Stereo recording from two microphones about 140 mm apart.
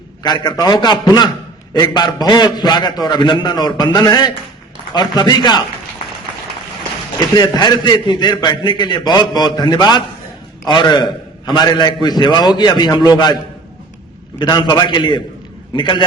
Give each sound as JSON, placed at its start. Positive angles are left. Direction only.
{"t": 0.2, "sound": "a man's voice", "side_deg": 30}
{"t": 7.2, "sound": "a man's voice", "side_deg": 30}
{"t": 14.3, "sound": "a man's voice", "side_deg": 30}